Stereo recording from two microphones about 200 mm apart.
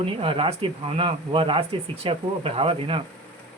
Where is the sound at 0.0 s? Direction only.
25° right (ahead or behind).